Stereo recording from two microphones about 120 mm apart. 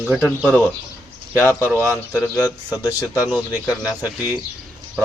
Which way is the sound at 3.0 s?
30° left (ahead or behind).